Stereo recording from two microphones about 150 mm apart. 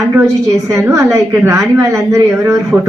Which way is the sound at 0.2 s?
20° right (ahead or behind).